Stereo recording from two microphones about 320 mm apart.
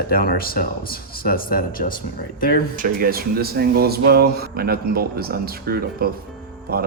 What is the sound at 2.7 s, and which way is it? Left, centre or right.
Speech, right.